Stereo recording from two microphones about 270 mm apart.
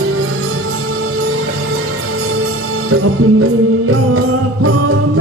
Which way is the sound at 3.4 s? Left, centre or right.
Right.